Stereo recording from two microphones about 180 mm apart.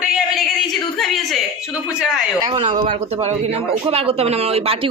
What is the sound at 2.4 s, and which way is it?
Speech, 25° right (ahead or behind).